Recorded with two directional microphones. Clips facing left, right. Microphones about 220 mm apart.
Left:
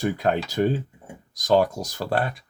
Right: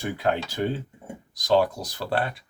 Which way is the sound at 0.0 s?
45° left (ahead or behind).